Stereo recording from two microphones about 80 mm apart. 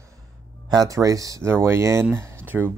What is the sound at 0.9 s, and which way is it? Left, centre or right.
Speech, right.